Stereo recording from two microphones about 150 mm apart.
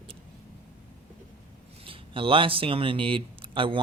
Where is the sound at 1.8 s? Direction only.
35° right (ahead or behind).